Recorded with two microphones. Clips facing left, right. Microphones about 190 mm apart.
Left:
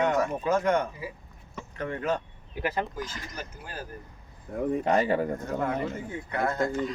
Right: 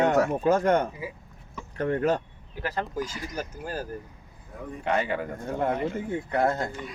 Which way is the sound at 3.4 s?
45° right (ahead or behind).